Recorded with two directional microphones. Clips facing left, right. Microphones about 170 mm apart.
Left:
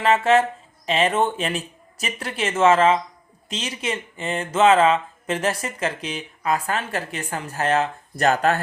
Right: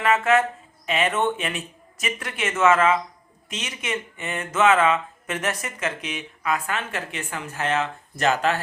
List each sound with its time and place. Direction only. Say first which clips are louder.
0.0 s a woman's voice: left 2 dB; 30° left (ahead or behind)